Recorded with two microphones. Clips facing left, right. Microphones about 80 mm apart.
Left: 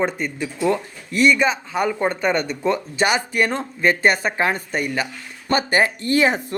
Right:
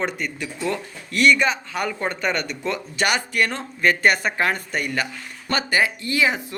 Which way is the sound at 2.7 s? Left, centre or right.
Left.